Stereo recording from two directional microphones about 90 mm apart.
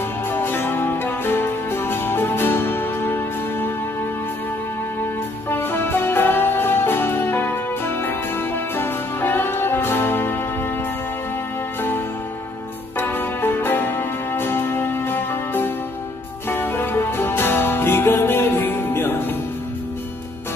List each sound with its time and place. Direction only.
0.3 s music: 25° left (ahead or behind)
5.5 s music: 25° left (ahead or behind)
11.8 s music: 25° left (ahead or behind)